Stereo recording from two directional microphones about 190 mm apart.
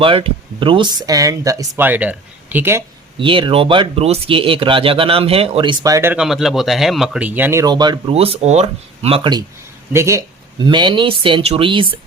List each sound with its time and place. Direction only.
0.0 s speech: 30° right (ahead or behind); by 2.8 s 10° right (ahead or behind)
3.2 s speech: 25° right (ahead or behind)
9.9 s speech: 15° right (ahead or behind)